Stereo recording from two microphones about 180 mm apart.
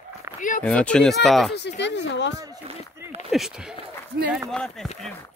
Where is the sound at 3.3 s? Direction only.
Centre (ahead or behind).